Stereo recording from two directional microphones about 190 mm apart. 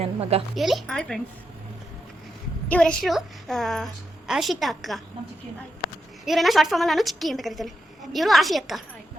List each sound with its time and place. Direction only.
0.0 s a woman's voice: 30° right (ahead or behind)
0.5 s a woman's voice: centre (ahead or behind)
2.6 s a woman's voice: 5° left (ahead or behind)
6.2 s a woman's voice: centre (ahead or behind)